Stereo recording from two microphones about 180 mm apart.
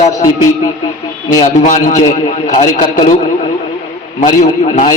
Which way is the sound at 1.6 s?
45° left (ahead or behind).